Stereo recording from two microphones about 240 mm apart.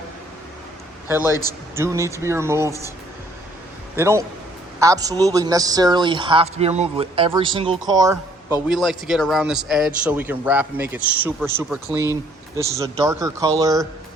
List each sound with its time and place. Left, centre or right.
1.2 s a man's voice: centre
1.7 s a man's voice: centre
3.9 s a man's voice: centre
8.7 s a man's voice: centre